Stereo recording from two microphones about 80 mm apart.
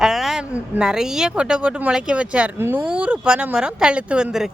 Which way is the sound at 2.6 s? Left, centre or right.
Right.